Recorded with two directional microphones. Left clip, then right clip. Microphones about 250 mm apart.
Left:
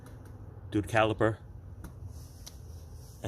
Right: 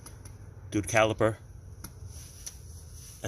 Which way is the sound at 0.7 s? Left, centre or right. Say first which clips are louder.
Right 2 dB; right.